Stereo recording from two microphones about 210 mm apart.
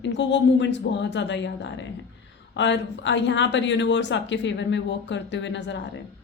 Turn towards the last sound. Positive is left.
turn(degrees=60)  # may be behind; listen again after turning